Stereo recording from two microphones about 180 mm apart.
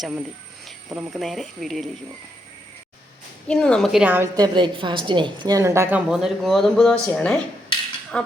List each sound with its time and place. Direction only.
0.0 s speech: 5° right (ahead or behind)
3.4 s a woman's voice: 5° left (ahead or behind); by 6.0 s 15° right (ahead or behind)
6.1 s speech: 5° right (ahead or behind)